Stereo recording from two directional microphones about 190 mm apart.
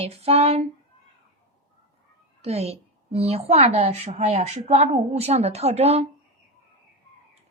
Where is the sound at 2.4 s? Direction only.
35° right (ahead or behind).